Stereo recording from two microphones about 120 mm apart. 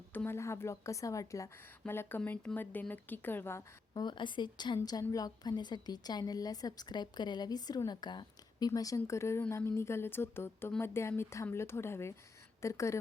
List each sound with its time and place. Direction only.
0.1 s a woman's voice: 15° left (ahead or behind)
3.9 s a woman's voice: 40° left (ahead or behind); by 13.0 s 25° left (ahead or behind)